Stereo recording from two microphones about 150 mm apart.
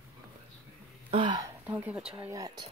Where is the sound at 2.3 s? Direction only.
25° right (ahead or behind).